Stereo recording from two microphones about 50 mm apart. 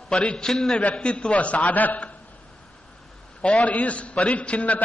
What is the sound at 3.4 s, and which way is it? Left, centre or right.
A man's voice, left.